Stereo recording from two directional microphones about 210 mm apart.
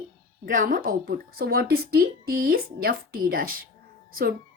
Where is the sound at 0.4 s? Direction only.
40° right (ahead or behind).